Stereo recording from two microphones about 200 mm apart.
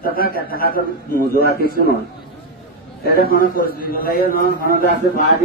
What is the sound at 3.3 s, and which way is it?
A man's voice, 45° left (ahead or behind).